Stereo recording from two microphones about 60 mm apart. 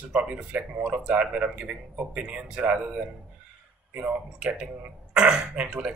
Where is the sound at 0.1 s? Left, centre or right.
Right.